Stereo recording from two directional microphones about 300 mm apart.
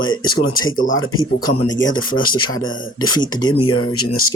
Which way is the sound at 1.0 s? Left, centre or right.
Left.